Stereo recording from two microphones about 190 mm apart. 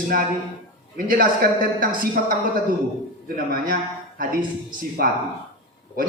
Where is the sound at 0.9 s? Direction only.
45° right (ahead or behind).